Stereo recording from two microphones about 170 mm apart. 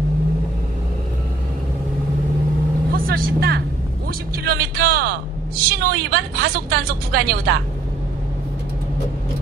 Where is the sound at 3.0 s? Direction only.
60° right (ahead or behind).